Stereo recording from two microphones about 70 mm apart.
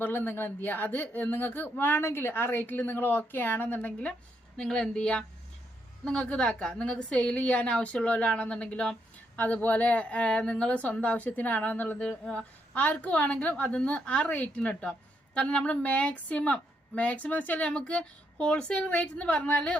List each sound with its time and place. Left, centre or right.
0.0 s a woman's voice: left; by 19.8 s centre